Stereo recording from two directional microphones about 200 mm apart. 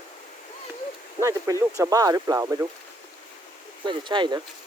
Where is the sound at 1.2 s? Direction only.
15° right (ahead or behind).